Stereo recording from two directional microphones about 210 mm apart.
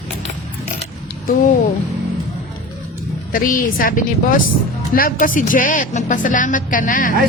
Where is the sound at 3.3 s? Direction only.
40° left (ahead or behind).